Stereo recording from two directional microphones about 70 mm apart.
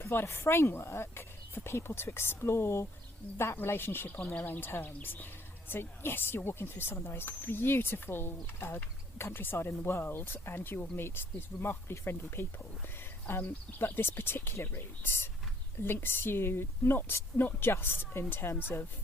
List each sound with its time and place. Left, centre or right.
0.0 s speech: left